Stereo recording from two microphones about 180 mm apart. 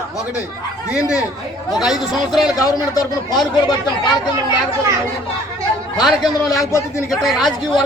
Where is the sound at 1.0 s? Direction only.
15° left (ahead or behind).